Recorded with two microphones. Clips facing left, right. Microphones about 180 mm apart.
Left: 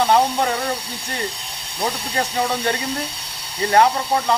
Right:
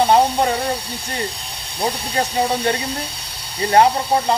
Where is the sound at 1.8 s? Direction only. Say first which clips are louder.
Right 2 dB; 30° right (ahead or behind).